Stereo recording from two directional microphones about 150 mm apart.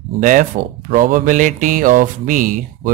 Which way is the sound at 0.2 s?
60° right (ahead or behind).